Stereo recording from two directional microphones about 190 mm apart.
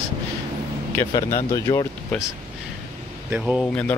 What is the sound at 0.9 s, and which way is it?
Speech, 15° left (ahead or behind).